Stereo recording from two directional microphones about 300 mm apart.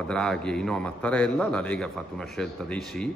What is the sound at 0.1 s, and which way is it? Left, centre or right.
Speech, centre.